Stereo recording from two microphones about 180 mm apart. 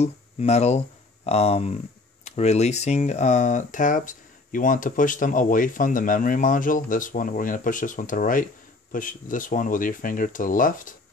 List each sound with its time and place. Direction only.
0.0 s speech: 35° left (ahead or behind)